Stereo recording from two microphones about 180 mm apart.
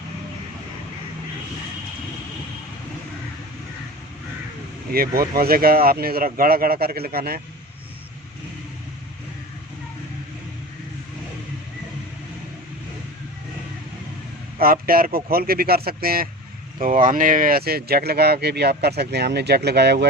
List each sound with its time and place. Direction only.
4.9 s speech: 55° right (ahead or behind)
14.6 s speech: 55° right (ahead or behind)